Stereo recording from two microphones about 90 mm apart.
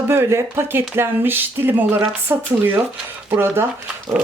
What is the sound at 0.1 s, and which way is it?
Speech, 30° right (ahead or behind).